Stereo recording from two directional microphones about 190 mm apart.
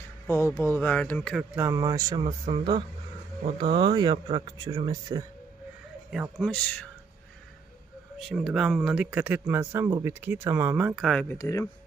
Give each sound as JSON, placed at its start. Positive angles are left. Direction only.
{"t": 0.3, "sound": "speech", "side_deg": 15}
{"t": 1.5, "sound": "speech", "side_deg": -15}
{"t": 6.0, "sound": "speech", "side_deg": -5}
{"t": 8.2, "sound": "speech", "side_deg": 0}
{"t": 11.3, "sound": "speech", "side_deg": 15}